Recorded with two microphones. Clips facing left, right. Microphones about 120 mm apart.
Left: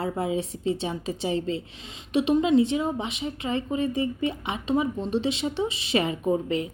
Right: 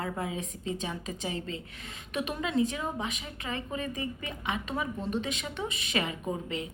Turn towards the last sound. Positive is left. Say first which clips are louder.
# left 9 dB
turn(degrees=35)  # may be behind; listen again after turning